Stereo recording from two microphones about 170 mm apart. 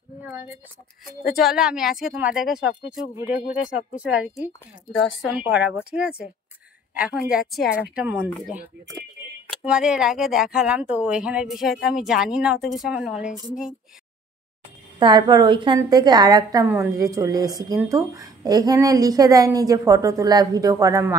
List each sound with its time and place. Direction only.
0.2 s a sound: 15° right (ahead or behind)
1.3 s speech: centre (ahead or behind)
9.5 s speech: 5° right (ahead or behind)
15.0 s a woman's voice: 25° right (ahead or behind)